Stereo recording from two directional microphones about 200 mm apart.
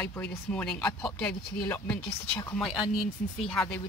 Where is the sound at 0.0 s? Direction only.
5° left (ahead or behind).